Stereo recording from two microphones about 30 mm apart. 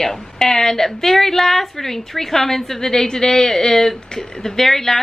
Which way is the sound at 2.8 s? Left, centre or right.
Left.